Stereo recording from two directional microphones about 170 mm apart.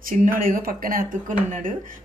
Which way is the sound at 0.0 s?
55° right (ahead or behind).